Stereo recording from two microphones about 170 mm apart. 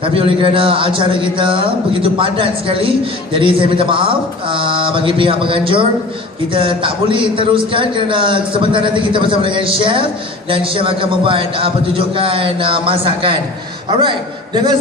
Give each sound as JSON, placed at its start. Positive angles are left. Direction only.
{"t": 0.0, "sound": "a man's voice", "side_deg": -30}